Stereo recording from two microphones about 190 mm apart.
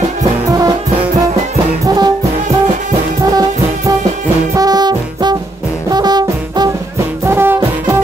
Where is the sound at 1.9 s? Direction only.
20° right (ahead or behind).